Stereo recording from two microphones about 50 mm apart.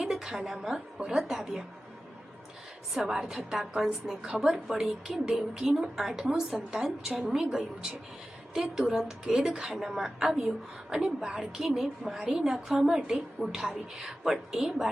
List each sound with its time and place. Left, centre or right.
0.1 s a woman's voice: centre
3.0 s a woman's voice: centre